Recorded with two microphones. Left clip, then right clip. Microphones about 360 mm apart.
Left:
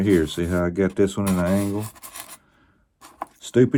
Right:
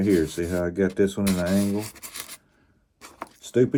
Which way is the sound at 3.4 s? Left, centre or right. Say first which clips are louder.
Left 3 dB; left.